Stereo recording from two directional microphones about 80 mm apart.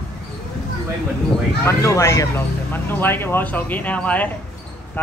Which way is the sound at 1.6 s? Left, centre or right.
Left.